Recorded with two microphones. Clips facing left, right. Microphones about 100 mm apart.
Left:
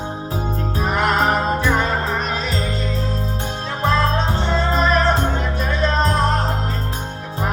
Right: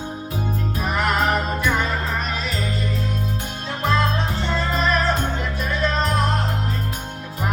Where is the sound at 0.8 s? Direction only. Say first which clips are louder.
Left 3 dB; 35° left (ahead or behind).